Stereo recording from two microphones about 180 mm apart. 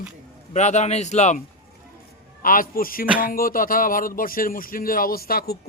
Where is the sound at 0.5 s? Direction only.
40° left (ahead or behind).